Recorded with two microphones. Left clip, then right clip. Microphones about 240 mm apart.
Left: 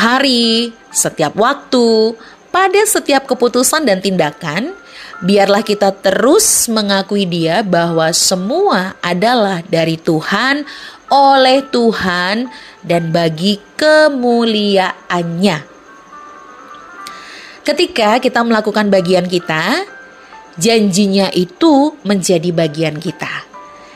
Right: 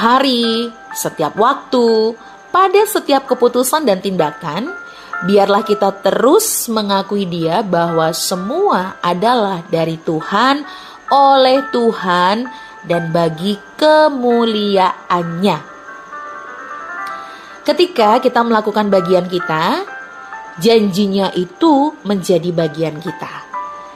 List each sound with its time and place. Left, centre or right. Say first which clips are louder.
0.0 s speech: left 1 dB; left
17.6 s speech: right 1 dB; left